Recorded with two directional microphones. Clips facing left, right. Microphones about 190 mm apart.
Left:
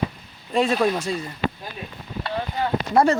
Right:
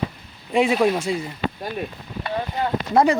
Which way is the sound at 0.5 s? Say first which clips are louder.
Right 2 dB; 10° right (ahead or behind).